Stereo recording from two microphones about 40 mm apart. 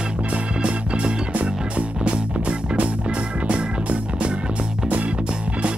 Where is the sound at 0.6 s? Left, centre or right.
Right.